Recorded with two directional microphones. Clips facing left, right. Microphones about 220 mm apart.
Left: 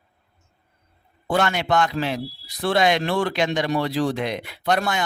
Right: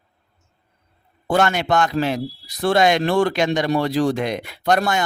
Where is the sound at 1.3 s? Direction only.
45° right (ahead or behind).